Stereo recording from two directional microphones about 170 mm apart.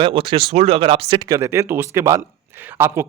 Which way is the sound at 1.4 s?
15° right (ahead or behind).